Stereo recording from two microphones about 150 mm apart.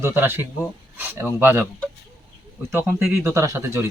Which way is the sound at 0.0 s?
15° right (ahead or behind).